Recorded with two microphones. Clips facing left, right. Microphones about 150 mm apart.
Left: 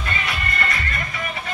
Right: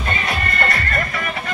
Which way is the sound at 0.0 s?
45° right (ahead or behind).